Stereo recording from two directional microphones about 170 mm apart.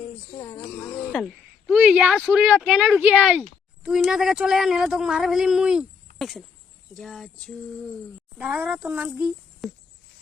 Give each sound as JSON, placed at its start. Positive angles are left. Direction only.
{"t": 0.3, "sound": "wild animals", "side_deg": 15}
{"t": 1.0, "sound": "a sound", "side_deg": 0}
{"t": 1.7, "sound": "a child's voice", "side_deg": -5}